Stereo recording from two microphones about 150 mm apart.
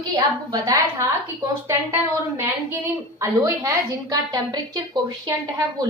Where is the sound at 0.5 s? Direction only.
25° right (ahead or behind).